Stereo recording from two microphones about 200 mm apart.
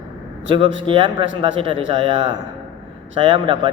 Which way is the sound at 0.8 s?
25° right (ahead or behind).